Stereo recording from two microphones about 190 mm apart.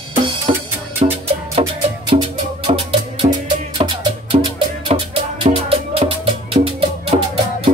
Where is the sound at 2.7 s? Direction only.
35° right (ahead or behind).